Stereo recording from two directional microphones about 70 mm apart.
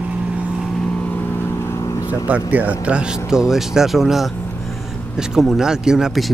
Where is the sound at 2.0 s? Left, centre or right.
Centre.